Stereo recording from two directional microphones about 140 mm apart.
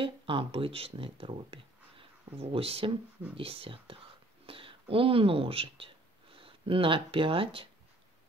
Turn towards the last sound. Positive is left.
turn(degrees=-40)  # may be behind; listen again after turning